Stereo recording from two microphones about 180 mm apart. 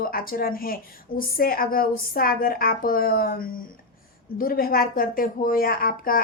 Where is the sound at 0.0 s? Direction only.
55° left (ahead or behind).